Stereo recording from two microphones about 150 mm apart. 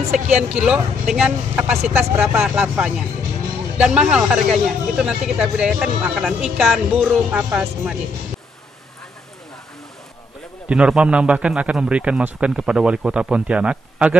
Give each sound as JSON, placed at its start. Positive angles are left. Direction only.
{"t": 0.1, "sound": "a man's voice", "side_deg": -5}
{"t": 10.7, "sound": "a man's voice", "side_deg": -5}